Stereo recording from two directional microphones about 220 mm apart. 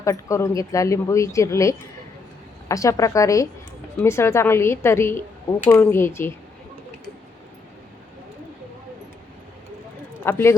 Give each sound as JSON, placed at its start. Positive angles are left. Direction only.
{"t": 0.0, "sound": "speech", "side_deg": 15}
{"t": 10.2, "sound": "speech", "side_deg": 10}